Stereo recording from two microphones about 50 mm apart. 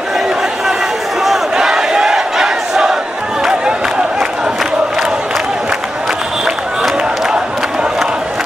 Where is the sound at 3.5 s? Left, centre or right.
Centre.